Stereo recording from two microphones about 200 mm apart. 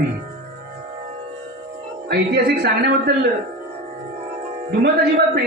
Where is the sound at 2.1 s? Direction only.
55° right (ahead or behind).